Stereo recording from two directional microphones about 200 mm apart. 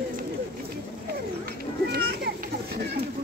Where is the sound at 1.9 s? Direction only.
50° right (ahead or behind).